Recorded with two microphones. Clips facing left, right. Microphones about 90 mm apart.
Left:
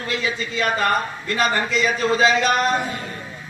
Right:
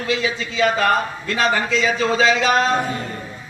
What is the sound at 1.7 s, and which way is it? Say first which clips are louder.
Speech: right 1 dB; 90° right.